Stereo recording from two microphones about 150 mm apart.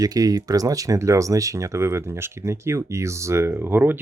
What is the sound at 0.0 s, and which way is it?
Speech, 25° right (ahead or behind).